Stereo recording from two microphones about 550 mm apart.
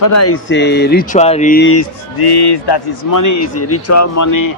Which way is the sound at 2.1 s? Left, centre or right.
Left.